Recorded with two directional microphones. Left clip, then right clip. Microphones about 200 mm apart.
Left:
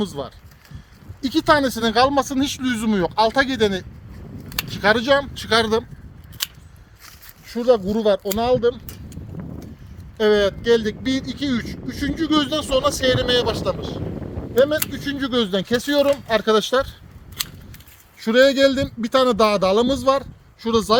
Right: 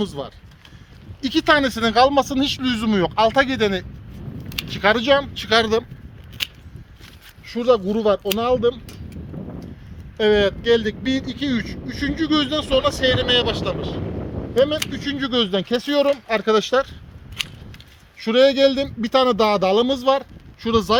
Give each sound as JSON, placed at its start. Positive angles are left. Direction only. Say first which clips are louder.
{"t": 0.0, "sound": "speech", "louder": "even", "side_deg": -25}
{"t": 7.5, "sound": "speech", "louder": "even", "side_deg": -25}
{"t": 10.2, "sound": "speech", "louder": "even", "side_deg": -25}
{"t": 18.2, "sound": "speech", "louder": "even", "side_deg": -15}